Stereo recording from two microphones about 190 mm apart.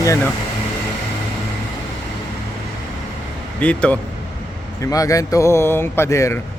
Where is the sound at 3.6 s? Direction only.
5° left (ahead or behind).